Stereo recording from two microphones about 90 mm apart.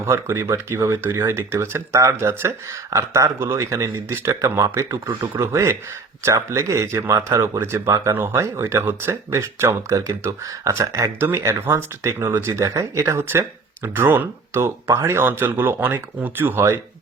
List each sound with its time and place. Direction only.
0.0 s speech: 30° right (ahead or behind)